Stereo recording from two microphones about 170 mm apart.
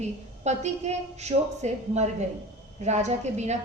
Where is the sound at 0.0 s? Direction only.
40° right (ahead or behind).